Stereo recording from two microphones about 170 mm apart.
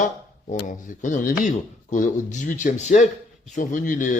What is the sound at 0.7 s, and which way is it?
A man's voice, 50° left (ahead or behind).